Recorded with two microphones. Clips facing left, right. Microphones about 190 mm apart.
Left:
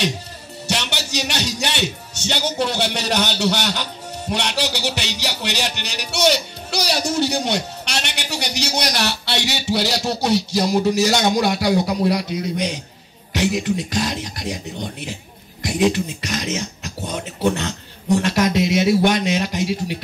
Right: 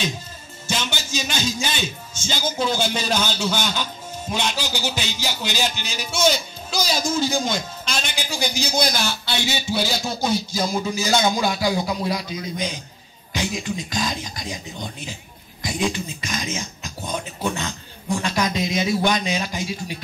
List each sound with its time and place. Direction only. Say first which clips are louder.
0.7 s a man's voice: left 2 dB; 70° left (ahead or behind)